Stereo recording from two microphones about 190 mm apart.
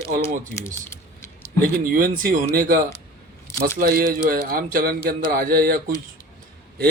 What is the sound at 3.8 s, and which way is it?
Speech, 50° right (ahead or behind).